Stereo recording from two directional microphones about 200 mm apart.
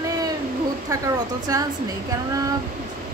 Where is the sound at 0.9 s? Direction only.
15° right (ahead or behind).